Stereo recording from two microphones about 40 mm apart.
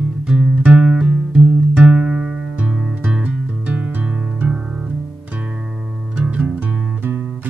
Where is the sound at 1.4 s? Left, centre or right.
Centre.